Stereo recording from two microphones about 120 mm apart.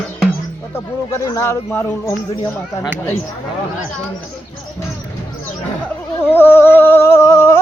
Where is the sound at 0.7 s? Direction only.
25° left (ahead or behind).